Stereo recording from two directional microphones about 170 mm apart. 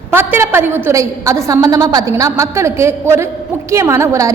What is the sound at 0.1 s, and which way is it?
A woman's voice, 15° right (ahead or behind).